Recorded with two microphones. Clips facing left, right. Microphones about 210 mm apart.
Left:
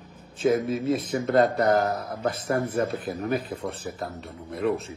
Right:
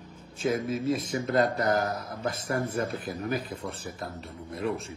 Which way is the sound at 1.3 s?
30° left (ahead or behind).